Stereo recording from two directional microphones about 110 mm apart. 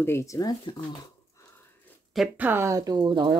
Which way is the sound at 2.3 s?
20° right (ahead or behind).